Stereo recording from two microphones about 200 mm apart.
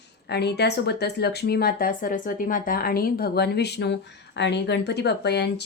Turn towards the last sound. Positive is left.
turn(degrees=55)  # may be behind; listen again after turning